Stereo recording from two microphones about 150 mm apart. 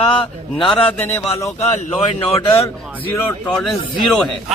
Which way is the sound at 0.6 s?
10° left (ahead or behind).